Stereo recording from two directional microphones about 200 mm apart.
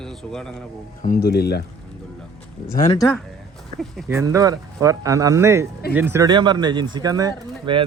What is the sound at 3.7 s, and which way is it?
Speech, 35° right (ahead or behind).